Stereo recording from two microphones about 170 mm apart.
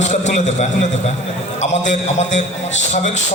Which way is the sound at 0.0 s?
45° left (ahead or behind).